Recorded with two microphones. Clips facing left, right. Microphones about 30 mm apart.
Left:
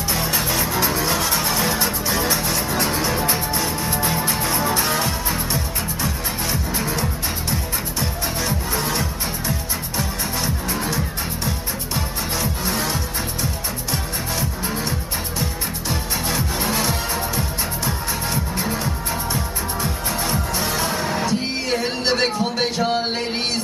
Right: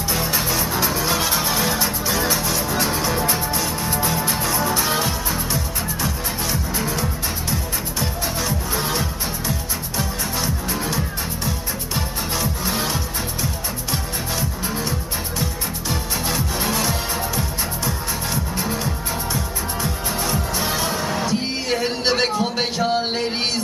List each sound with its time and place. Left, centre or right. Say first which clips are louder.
0.7 s music: left 2 dB; centre
1.0 s music: even; centre
1.6 s music: even; centre
4.8 s music: even; centre
6.0 s music: left 1 dB; centre
10.4 s music: even; centre
12.7 s music: even; centre
17.4 s music: even; centre
19.8 s music: even; centre
20.6 s music: even; centre
20.9 s music: even; centre
22.2 s a sound: even; centre